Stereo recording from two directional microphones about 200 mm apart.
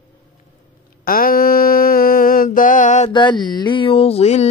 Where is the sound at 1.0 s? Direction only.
45° left (ahead or behind).